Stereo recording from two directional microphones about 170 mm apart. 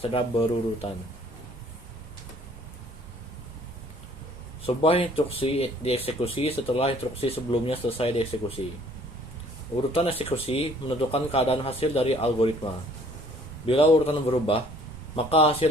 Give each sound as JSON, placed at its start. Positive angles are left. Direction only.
{"t": 0.0, "sound": "speech", "side_deg": 30}
{"t": 4.6, "sound": "speech", "side_deg": 35}
{"t": 9.9, "sound": "speech", "side_deg": 35}
{"t": 13.7, "sound": "speech", "side_deg": 35}